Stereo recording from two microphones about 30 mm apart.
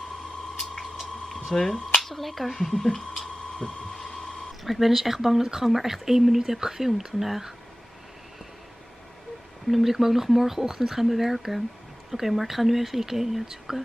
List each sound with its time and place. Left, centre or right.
1.5 s speech: left
2.0 s speech: centre
3.5 s a sound: centre
4.6 s speech: centre
9.7 s speech: centre